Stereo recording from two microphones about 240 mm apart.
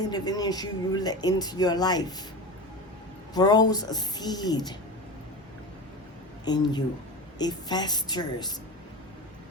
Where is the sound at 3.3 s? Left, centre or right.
Centre.